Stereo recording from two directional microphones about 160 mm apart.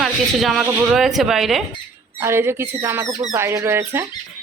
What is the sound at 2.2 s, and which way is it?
Speech, 15° right (ahead or behind).